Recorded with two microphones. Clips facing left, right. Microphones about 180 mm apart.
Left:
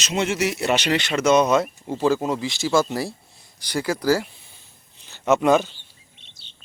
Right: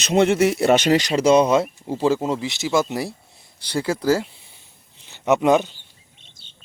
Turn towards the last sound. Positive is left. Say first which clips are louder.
# right 1 dB
turn(degrees=-45)  # may be behind; listen again after turning